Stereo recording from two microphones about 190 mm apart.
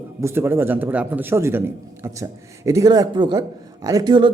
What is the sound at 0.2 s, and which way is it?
Speech, 15° right (ahead or behind).